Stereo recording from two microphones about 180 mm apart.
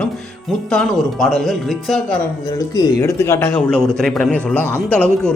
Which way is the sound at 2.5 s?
20° left (ahead or behind).